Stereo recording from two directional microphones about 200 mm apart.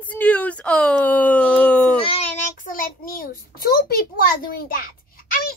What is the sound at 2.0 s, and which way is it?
Child singing, 30° left (ahead or behind).